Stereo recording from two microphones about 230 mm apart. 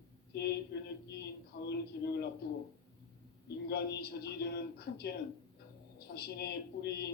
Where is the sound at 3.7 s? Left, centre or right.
Left.